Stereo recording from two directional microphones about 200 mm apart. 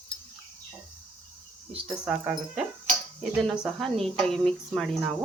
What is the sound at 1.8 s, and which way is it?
Speech, 5° right (ahead or behind).